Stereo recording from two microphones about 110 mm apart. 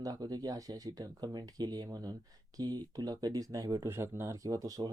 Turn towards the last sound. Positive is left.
turn(degrees=-30)  # may be behind; listen again after turning